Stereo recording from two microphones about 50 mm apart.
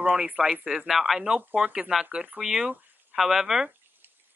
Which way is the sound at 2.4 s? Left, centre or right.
Centre.